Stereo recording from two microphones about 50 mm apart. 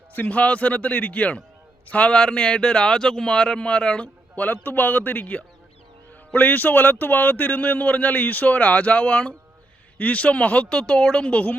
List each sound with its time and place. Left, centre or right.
0.2 s speech: left
10.8 s a woman's voice: centre
11.3 s speech: left